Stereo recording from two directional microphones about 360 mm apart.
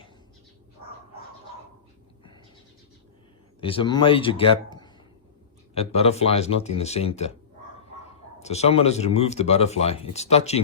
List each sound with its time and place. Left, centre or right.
3.6 s speech: centre
8.4 s speech: centre